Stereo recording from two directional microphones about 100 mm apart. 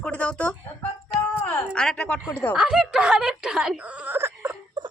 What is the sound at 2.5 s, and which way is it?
Speech, 5° right (ahead or behind).